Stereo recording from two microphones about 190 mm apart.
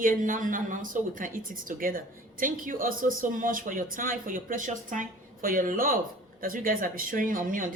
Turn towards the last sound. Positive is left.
turn(degrees=-45)  # may be behind; listen again after turning